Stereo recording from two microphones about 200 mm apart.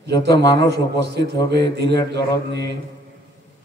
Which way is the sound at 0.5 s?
55° right (ahead or behind).